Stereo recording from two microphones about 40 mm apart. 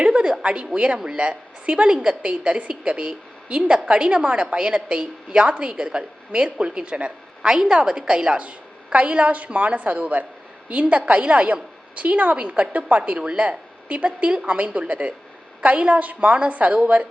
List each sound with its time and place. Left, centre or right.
0.0 s a woman's voice: right